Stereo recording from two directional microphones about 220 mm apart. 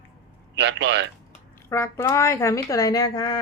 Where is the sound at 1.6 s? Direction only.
10° left (ahead or behind).